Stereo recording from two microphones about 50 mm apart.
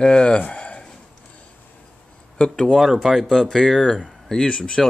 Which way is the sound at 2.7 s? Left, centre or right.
Centre.